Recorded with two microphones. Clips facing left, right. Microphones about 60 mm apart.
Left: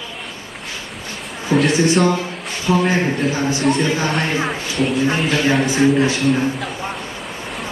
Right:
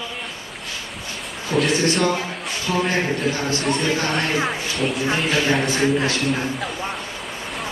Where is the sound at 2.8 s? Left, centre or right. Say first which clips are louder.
Left 3 dB; centre.